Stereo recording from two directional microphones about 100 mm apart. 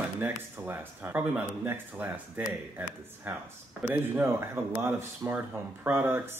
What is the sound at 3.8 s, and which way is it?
Speech, 20° right (ahead or behind).